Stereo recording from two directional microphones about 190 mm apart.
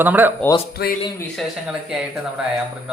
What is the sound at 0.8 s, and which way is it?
Speech, 55° left (ahead or behind).